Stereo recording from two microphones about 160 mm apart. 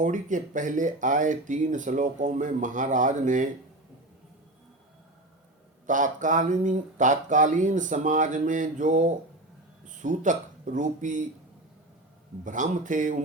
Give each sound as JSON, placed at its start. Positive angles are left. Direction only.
{"t": 0.0, "sound": "speech", "side_deg": -50}
{"t": 5.8, "sound": "speech", "side_deg": -55}
{"t": 12.5, "sound": "speech", "side_deg": -50}